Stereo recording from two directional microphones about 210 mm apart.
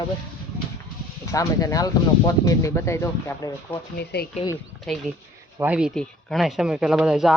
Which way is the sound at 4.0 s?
50° left (ahead or behind).